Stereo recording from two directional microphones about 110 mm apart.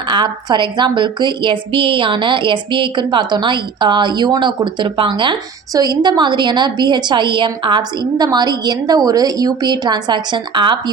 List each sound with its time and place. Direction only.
0.1 s a woman's voice: 45° right (ahead or behind)